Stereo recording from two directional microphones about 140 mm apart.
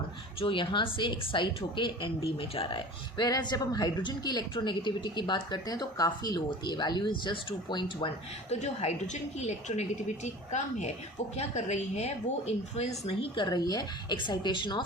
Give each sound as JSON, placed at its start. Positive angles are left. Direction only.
{"t": 0.3, "sound": "a woman's voice", "side_deg": 35}
{"t": 8.4, "sound": "a woman's voice", "side_deg": 50}
{"t": 13.1, "sound": "a woman's voice", "side_deg": 35}